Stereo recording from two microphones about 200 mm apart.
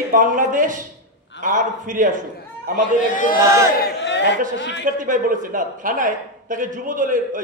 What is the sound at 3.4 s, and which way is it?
Speech, 15° right (ahead or behind).